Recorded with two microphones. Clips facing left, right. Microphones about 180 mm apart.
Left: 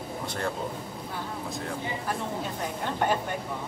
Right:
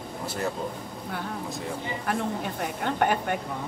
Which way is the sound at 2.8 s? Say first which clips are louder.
Right 3 dB; 60° right (ahead or behind).